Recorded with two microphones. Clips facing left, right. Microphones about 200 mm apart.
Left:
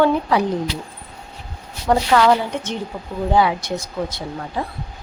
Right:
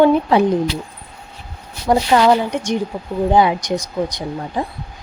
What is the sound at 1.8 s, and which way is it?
Speech, 15° right (ahead or behind).